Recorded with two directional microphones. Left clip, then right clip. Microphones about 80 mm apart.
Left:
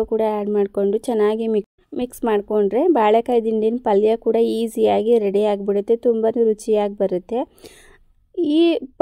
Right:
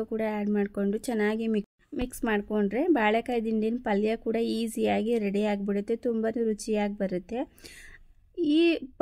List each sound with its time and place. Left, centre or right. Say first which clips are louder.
0.0 s a woman's voice: left 11 dB; left